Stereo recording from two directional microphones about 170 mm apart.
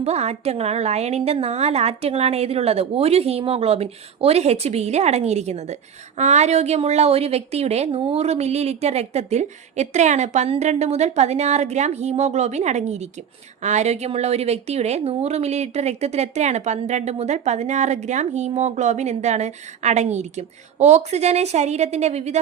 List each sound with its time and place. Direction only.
0.0 s a woman's voice: 40° right (ahead or behind)